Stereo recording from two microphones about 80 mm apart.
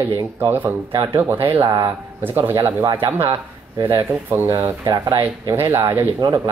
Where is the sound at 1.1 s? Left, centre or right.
Right.